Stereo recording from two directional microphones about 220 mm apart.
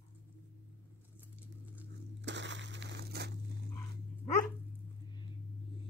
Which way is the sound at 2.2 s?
55° right (ahead or behind).